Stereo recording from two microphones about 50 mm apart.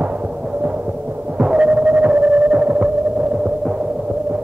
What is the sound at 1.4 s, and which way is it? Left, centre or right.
Hum, right.